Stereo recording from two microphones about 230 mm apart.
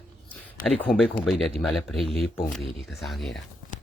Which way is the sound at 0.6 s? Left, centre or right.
Centre.